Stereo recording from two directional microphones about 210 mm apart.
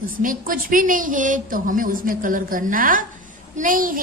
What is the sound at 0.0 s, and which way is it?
A woman's voice, 40° right (ahead or behind).